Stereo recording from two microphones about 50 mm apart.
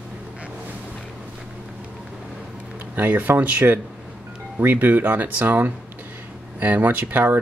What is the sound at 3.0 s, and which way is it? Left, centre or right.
Speech, right.